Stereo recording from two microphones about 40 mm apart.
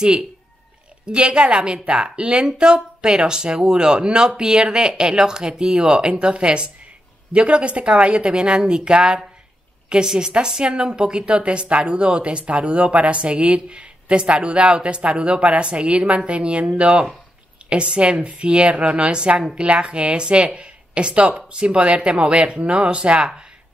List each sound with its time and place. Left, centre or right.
1.0 s speech: right